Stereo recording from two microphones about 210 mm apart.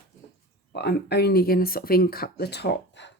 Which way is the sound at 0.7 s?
50° left (ahead or behind).